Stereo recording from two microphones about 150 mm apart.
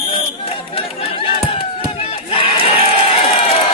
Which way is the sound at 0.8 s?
40° left (ahead or behind).